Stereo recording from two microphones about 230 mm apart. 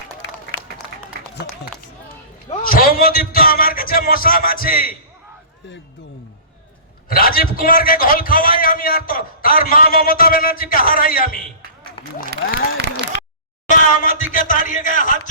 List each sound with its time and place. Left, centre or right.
0.9 s applause: right
2.5 s a man's voice: left
7.1 s a man's voice: left
12.3 s a sound: right
13.1 s a sound: left
13.7 s a man's voice: left